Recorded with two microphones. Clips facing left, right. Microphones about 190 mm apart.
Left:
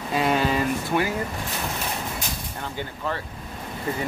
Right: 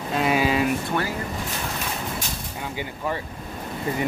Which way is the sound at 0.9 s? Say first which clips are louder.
Left 2 dB; 5° left (ahead or behind).